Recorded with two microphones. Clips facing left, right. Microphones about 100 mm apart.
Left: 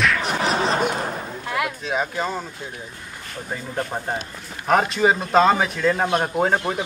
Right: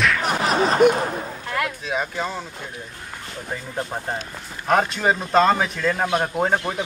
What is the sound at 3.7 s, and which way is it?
Speech, 5° left (ahead or behind).